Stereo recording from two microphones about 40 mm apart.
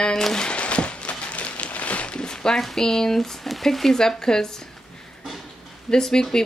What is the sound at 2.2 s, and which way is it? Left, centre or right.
Zipper, centre.